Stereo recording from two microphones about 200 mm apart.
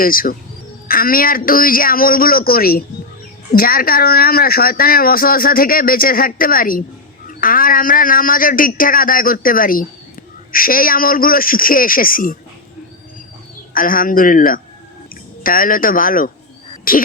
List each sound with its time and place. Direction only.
0.0 s speech: 45° left (ahead or behind)
13.7 s a woman's voice: 45° left (ahead or behind)